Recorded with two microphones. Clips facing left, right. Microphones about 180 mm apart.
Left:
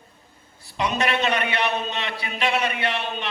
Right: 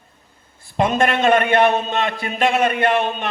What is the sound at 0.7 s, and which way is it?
A man's voice, 50° right (ahead or behind).